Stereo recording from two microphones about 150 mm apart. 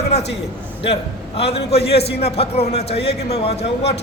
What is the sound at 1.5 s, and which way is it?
A man's voice, 45° left (ahead or behind).